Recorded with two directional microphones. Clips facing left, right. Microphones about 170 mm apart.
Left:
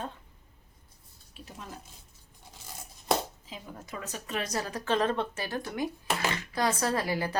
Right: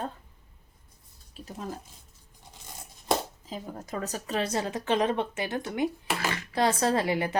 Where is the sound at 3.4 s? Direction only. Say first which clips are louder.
Right 6 dB; 40° right (ahead or behind).